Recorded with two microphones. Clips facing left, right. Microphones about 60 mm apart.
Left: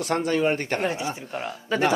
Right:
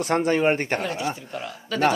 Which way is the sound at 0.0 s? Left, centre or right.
Right.